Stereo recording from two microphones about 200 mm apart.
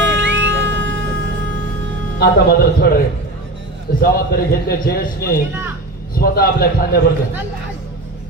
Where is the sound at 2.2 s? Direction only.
50° left (ahead or behind).